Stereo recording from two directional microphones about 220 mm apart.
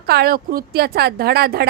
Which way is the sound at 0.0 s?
45° right (ahead or behind).